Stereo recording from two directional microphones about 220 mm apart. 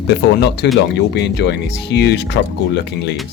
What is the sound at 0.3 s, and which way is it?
Speech, 50° left (ahead or behind).